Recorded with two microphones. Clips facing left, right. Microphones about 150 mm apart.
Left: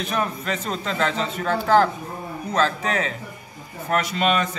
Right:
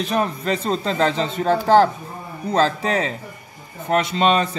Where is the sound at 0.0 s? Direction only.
30° right (ahead or behind).